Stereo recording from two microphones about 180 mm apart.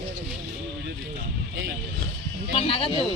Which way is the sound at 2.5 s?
30° left (ahead or behind).